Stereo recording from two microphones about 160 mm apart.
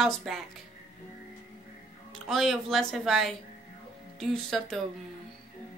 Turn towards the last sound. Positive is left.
turn(degrees=0)  # may be behind; listen again after turning